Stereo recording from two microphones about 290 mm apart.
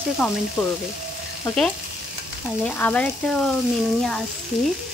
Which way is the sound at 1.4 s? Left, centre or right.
Centre.